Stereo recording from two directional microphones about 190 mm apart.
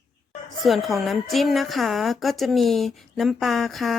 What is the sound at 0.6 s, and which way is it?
A woman's voice, centre (ahead or behind).